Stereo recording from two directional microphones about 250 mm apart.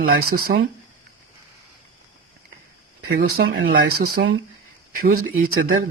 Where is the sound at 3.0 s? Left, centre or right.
Right.